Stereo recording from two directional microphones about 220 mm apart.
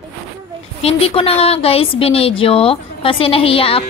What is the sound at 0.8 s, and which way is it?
Speech, 25° left (ahead or behind).